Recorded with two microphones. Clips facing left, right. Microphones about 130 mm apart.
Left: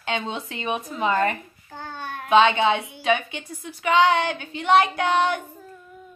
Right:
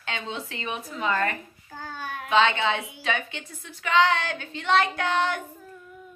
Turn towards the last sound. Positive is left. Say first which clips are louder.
# left 4 dB
turn(degrees=15)  # may be behind; listen again after turning